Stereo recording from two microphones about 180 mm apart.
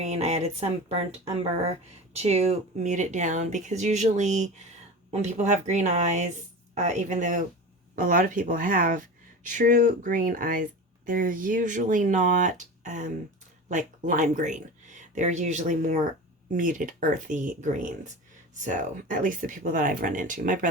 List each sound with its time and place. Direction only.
0.0 s a woman's voice: 35° right (ahead or behind)
2.1 s speech: 35° right (ahead or behind)